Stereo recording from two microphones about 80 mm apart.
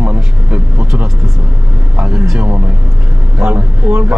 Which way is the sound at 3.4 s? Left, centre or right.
Right.